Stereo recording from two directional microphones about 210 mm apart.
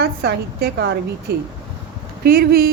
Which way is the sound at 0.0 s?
50° right (ahead or behind).